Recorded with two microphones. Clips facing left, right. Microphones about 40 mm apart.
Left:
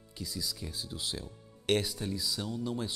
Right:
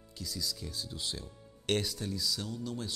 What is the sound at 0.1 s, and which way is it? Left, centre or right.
Speech, centre.